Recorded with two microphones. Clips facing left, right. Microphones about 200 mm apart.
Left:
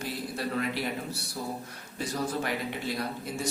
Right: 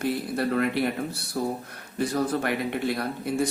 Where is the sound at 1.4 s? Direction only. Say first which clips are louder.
Right 9 dB; 65° right (ahead or behind).